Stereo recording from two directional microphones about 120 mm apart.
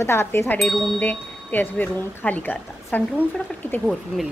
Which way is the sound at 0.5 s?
5° left (ahead or behind).